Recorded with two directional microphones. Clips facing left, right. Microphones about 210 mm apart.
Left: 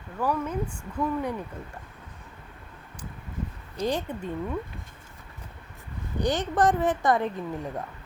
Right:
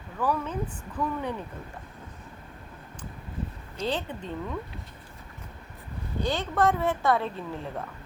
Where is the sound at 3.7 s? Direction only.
10° left (ahead or behind).